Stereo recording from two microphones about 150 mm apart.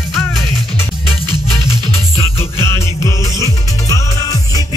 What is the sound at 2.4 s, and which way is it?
Music, 20° left (ahead or behind).